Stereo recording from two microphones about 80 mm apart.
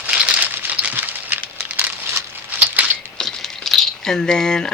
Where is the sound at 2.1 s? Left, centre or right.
Right.